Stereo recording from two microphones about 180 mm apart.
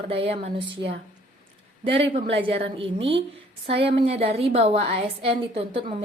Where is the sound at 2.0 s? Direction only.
30° right (ahead or behind).